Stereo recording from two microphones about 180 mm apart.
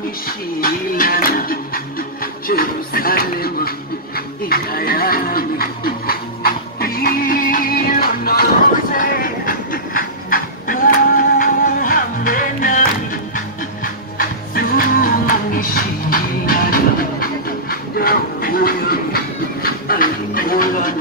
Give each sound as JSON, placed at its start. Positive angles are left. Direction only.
{"t": 0.6, "sound": "music", "side_deg": 50}
{"t": 8.9, "sound": "train", "side_deg": 50}
{"t": 14.1, "sound": "music", "side_deg": 55}
{"t": 19.6, "sound": "dog", "side_deg": 55}